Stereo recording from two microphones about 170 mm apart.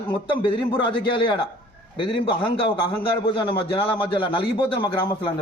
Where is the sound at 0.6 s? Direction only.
30° left (ahead or behind).